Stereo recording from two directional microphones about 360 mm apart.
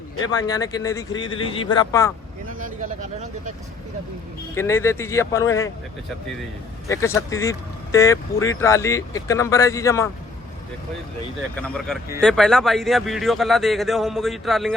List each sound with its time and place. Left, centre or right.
0.3 s speech: centre
2.8 s speech: right
4.5 s speech: centre
6.8 s speech: centre
11.5 s speech: centre